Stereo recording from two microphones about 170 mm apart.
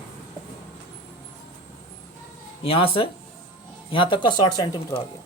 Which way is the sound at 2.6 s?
35° left (ahead or behind).